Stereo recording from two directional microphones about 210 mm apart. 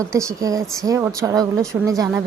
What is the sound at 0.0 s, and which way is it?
A woman's voice, 15° right (ahead or behind).